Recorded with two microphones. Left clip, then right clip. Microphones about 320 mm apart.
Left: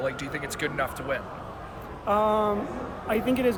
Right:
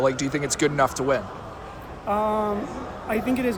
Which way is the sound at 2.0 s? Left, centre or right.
Centre.